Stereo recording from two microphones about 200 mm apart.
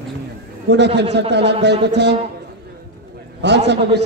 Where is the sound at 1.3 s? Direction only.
60° right (ahead or behind).